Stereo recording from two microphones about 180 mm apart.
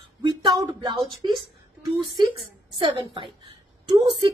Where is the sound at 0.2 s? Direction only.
20° right (ahead or behind).